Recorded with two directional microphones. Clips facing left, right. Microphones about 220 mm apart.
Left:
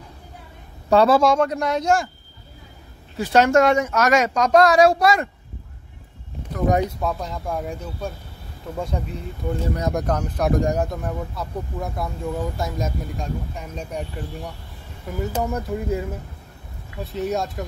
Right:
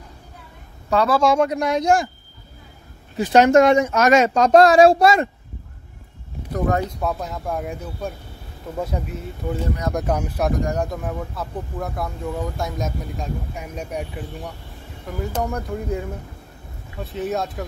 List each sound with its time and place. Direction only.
0.8 s a man's voice: 30° left (ahead or behind)
1.2 s speech: 10° right (ahead or behind)
3.2 s speech: 20° right (ahead or behind)
7.0 s speech: 5° right (ahead or behind)